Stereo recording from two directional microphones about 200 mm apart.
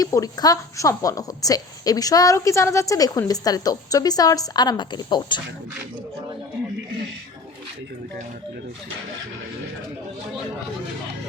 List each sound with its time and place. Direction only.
0.0 s a woman's voice: 15° left (ahead or behind)